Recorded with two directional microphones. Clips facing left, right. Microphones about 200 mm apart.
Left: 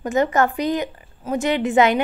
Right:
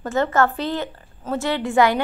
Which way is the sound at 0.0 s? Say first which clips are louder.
Left 1 dB; 15° left (ahead or behind).